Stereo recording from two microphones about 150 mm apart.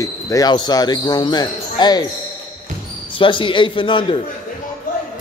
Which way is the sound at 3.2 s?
35° left (ahead or behind).